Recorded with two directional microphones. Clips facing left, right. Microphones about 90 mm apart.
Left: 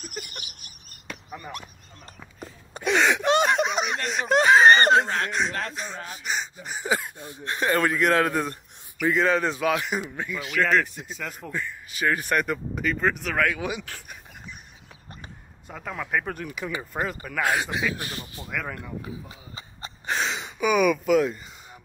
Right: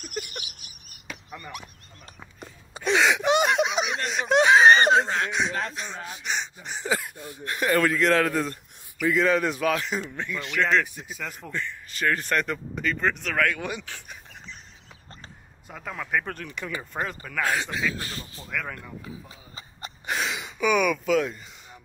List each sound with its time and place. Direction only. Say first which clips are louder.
0.0 s a sound: right 3 dB; centre (ahead or behind)
2.9 s gasp: even; 5° right (ahead or behind)
4.1 s snicker: even; centre (ahead or behind)
6.9 s speech: left 1 dB; 20° left (ahead or behind)
9.0 s speech: even; 35° left (ahead or behind)
9.7 s speech: left 1 dB; 10° left (ahead or behind)
15.7 s speech: left 1 dB; 5° left (ahead or behind); by 18.5 s 20° left (ahead or behind)
18.5 s speech: even; 5° left (ahead or behind)
19.8 s a sound: left 1 dB; 30° left (ahead or behind)
20.5 s speech: left 2 dB; 5° left (ahead or behind)